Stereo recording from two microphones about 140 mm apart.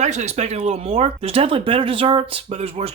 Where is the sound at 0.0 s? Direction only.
55° right (ahead or behind).